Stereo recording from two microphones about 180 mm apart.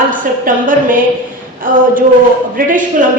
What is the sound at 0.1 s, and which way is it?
A woman's voice, 50° right (ahead or behind).